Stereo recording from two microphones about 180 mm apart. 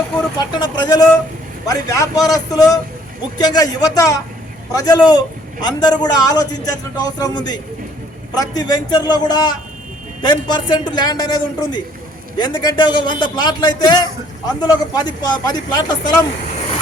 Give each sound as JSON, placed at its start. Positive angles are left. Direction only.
{"t": 0.3, "sound": "a man's voice", "side_deg": 25}